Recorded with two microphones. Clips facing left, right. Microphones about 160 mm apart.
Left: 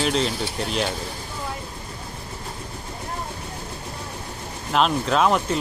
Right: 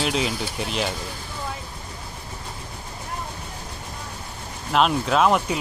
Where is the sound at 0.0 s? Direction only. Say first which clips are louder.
Left 2 dB; 5° right (ahead or behind).